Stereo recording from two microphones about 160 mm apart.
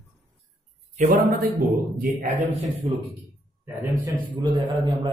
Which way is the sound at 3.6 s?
15° right (ahead or behind).